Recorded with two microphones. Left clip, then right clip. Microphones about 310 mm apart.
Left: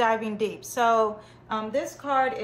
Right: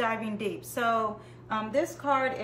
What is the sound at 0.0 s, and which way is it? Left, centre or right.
A woman's voice, centre.